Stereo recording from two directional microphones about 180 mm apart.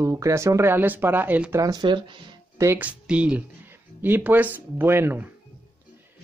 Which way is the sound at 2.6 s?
10° right (ahead or behind).